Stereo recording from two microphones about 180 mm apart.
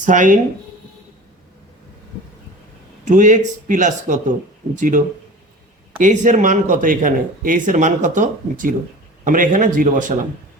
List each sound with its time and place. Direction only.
0.0 s speech: 45° right (ahead or behind)
3.0 s speech: 45° right (ahead or behind)